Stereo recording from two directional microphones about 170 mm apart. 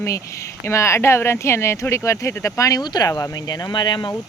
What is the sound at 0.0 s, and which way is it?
Speech, 20° left (ahead or behind).